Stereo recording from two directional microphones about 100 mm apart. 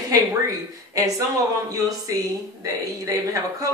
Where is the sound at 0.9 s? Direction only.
35° right (ahead or behind).